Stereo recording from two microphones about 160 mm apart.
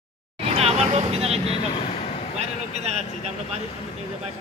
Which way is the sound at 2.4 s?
40° right (ahead or behind).